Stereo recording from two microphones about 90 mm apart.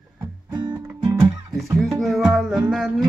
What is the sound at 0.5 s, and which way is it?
Music, 55° right (ahead or behind).